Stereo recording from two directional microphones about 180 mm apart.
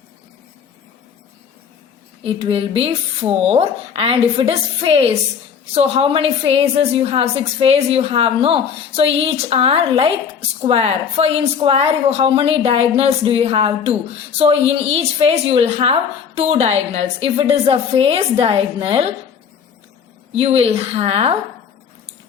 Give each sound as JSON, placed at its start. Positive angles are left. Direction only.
{"t": 2.2, "sound": "a woman's voice", "side_deg": -30}
{"t": 20.3, "sound": "a woman's voice", "side_deg": -35}